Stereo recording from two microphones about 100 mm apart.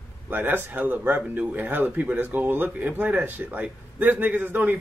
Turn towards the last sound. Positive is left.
turn(degrees=-20)  # may be behind; listen again after turning